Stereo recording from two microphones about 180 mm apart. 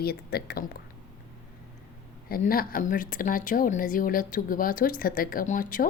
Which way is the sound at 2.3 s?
55° left (ahead or behind).